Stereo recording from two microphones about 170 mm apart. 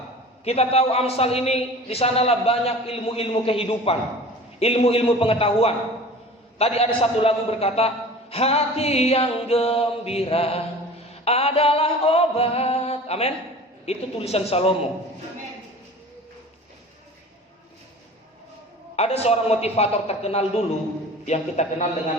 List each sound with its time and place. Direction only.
0.4 s a man's voice: 35° left (ahead or behind)
18.9 s a man's voice: 40° left (ahead or behind)